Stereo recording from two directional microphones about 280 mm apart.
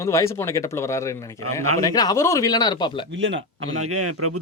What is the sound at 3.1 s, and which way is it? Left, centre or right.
A man's voice, right.